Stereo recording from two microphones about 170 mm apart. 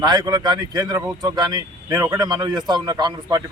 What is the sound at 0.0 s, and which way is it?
A man's voice, 25° right (ahead or behind).